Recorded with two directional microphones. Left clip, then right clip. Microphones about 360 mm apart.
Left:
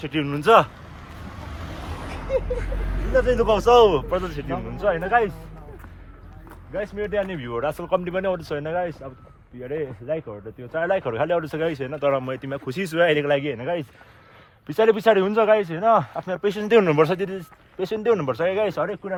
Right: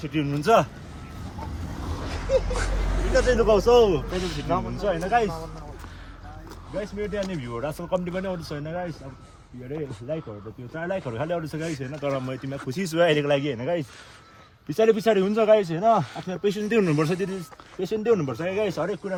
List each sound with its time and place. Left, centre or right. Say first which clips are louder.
0.0 s speech: left 3 dB; centre
2.0 s a sound: right 1 dB; left
2.8 s hubbub: right 3 dB; right
3.2 s a man's voice: left 1 dB; left
4.8 s speech: left 5 dB; centre
6.7 s speech: left 4 dB; centre